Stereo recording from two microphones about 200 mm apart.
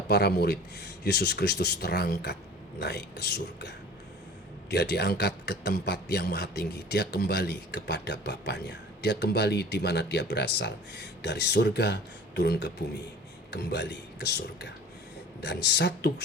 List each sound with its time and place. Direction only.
0.1 s a man's voice: 55° left (ahead or behind)